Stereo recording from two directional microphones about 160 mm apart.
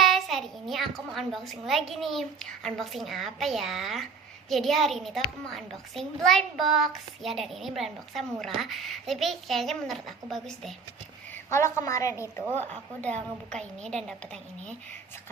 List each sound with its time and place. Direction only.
0.0 s a child's voice: centre (ahead or behind)
11.4 s a woman's voice: 15° left (ahead or behind)